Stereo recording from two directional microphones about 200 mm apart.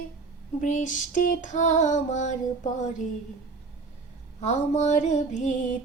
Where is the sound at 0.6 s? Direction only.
40° left (ahead or behind).